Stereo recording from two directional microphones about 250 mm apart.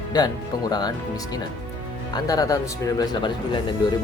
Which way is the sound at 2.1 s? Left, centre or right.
Centre.